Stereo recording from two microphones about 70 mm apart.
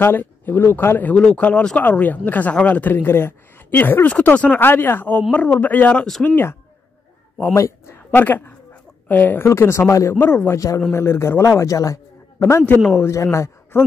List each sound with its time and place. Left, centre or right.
0.0 s speech: left
1.1 s speech: centre
4.6 s speech: left
7.5 s speech: left
8.1 s speech: left
9.5 s a man's voice: left